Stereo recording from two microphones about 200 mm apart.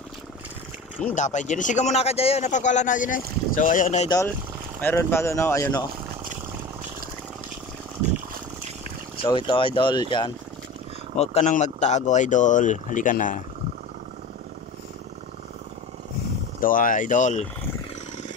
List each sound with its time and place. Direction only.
1.1 s speech: 35° left (ahead or behind)
4.7 s speech: 10° left (ahead or behind)
9.1 s speech: 25° left (ahead or behind)
11.1 s speech: 35° left (ahead or behind)
16.5 s speech: 45° left (ahead or behind)